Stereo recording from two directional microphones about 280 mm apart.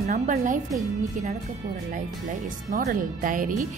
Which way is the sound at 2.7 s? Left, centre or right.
Right.